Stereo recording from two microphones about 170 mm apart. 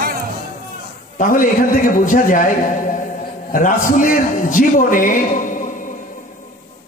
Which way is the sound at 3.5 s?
55° left (ahead or behind).